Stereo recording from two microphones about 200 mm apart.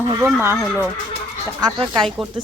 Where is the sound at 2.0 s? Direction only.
Centre (ahead or behind).